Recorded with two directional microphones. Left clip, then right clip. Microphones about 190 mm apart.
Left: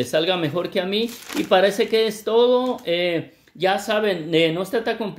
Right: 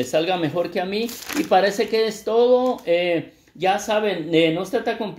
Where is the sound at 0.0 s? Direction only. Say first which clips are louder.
Even; 40° left (ahead or behind).